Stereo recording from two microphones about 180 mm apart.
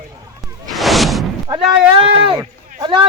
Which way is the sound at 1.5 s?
20° right (ahead or behind).